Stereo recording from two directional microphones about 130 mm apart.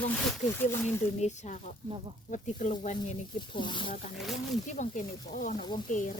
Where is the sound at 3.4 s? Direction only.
35° left (ahead or behind).